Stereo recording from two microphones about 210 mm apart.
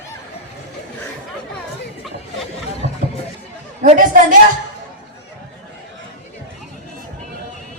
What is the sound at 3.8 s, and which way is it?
Speech, 40° right (ahead or behind).